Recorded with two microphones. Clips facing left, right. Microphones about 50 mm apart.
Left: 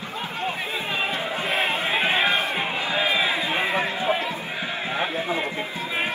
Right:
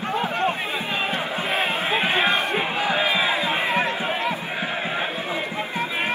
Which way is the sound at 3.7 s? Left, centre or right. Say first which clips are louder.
Even; right.